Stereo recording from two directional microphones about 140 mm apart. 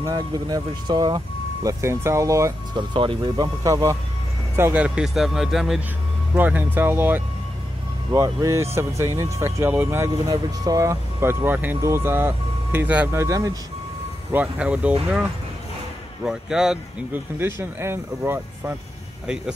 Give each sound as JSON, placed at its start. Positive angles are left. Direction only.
{"t": 0.0, "sound": "speech", "side_deg": -30}
{"t": 2.9, "sound": "speech", "side_deg": -35}
{"t": 10.3, "sound": "speech", "side_deg": -25}
{"t": 14.3, "sound": "speech", "side_deg": -10}
{"t": 16.3, "sound": "speech", "side_deg": -5}